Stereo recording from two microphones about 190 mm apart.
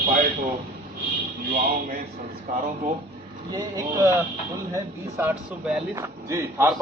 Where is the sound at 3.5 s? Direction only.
20° right (ahead or behind).